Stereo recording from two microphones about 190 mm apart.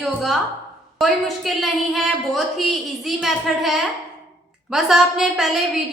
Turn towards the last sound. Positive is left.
turn(degrees=0)  # may be behind; listen again after turning